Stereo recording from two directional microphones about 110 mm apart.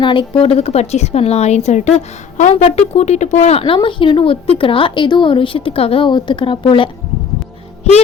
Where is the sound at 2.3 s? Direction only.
80° left.